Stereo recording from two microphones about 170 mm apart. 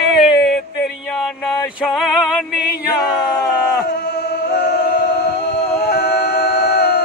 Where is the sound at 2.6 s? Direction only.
70° left (ahead or behind).